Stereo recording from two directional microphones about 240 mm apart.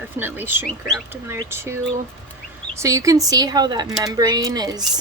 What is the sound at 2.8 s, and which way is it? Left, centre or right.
Speech, centre.